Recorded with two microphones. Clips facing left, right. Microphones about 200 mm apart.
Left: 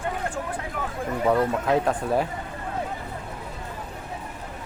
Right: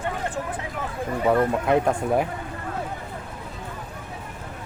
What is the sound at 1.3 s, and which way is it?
Speech, 10° right (ahead or behind).